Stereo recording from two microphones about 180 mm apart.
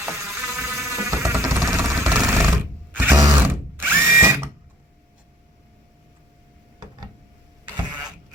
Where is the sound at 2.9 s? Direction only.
10° right (ahead or behind).